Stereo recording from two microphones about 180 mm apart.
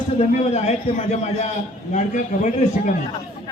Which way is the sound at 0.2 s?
40° left (ahead or behind).